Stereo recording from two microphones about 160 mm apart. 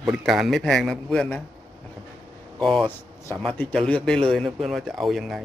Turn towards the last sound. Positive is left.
turn(degrees=0)  # may be behind; listen again after turning